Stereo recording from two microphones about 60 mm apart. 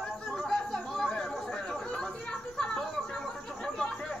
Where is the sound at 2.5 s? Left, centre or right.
Centre.